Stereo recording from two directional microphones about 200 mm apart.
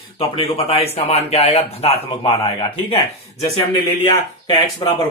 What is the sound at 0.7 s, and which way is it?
Speech, 30° left (ahead or behind).